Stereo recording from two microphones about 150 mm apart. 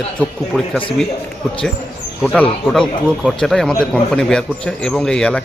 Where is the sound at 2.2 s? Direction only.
5° left (ahead or behind).